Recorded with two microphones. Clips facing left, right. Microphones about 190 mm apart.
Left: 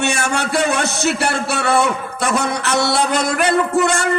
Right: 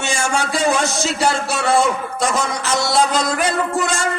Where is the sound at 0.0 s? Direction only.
65° left (ahead or behind).